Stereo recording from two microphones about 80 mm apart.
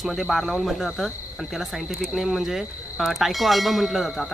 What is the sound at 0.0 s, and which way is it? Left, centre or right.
Speech, centre.